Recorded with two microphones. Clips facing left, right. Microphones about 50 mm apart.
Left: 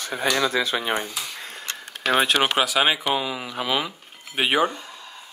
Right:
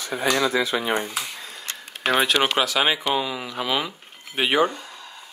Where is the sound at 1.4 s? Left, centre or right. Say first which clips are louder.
Left 1 dB; left.